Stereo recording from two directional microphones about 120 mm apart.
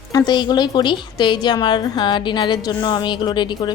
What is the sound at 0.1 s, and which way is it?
A woman's voice, 35° left (ahead or behind).